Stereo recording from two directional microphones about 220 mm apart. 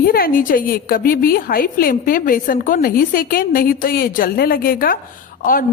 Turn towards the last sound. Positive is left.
turn(degrees=40)  # may be behind; listen again after turning